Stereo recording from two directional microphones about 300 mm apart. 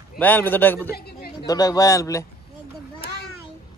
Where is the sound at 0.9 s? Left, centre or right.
Left.